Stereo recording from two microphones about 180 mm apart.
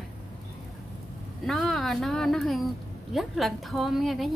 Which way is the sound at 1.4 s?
Centre (ahead or behind).